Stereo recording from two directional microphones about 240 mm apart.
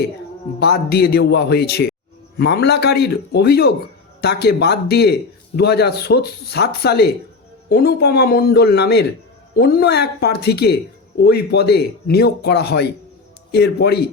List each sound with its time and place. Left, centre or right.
0.6 s a man's voice: left